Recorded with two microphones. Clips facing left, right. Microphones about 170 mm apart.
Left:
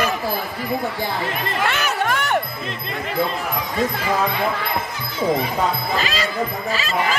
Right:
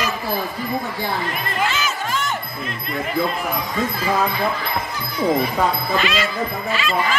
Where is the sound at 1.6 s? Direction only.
60° left (ahead or behind).